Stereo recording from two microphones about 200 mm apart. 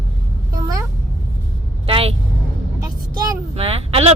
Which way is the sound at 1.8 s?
30° right (ahead or behind).